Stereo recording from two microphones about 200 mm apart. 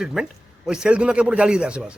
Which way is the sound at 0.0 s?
5° right (ahead or behind).